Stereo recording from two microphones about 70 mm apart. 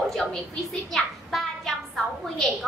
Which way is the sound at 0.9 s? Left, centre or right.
Centre.